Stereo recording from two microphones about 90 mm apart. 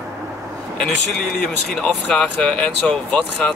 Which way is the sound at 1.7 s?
10° left (ahead or behind).